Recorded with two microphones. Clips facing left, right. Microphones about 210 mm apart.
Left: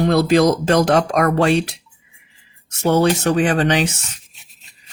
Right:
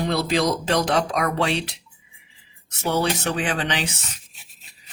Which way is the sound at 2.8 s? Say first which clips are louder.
Left 7 dB; 45° left (ahead or behind).